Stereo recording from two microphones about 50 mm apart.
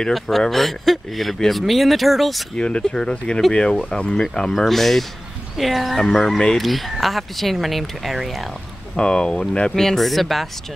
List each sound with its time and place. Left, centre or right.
0.4 s speech: centre
2.5 s speech: centre
8.9 s speech: centre
9.8 s speech: centre